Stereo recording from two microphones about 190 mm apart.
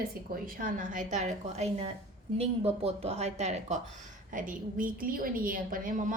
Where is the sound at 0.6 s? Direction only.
45° right (ahead or behind).